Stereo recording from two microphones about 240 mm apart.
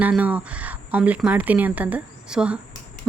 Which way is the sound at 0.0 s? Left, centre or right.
Centre.